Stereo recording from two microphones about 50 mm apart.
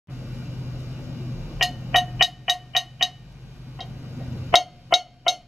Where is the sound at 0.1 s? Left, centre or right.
Centre.